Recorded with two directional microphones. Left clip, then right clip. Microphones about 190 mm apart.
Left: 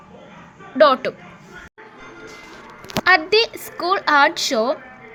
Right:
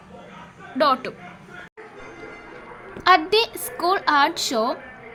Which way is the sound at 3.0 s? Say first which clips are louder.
Left 2 dB; 5° left (ahead or behind).